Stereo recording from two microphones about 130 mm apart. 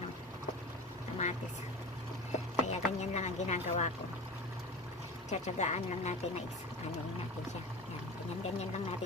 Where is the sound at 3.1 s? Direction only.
65° left (ahead or behind).